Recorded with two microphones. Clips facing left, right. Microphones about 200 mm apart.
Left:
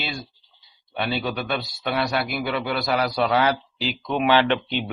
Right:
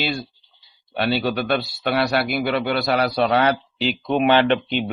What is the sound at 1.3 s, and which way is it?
Speech, 70° right (ahead or behind).